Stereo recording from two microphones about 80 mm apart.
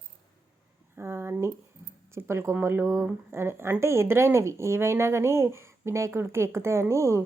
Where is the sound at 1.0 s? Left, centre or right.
Right.